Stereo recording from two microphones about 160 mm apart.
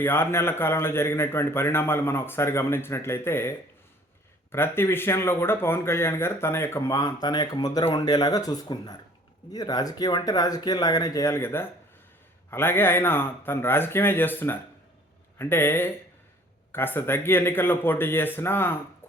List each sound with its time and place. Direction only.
0.0 s a man's voice: 15° left (ahead or behind)
4.5 s a man's voice: 15° left (ahead or behind)